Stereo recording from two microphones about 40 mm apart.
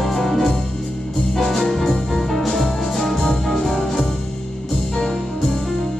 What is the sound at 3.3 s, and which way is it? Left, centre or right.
Music, centre.